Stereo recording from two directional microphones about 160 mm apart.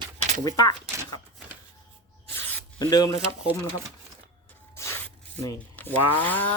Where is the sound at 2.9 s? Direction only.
20° left (ahead or behind).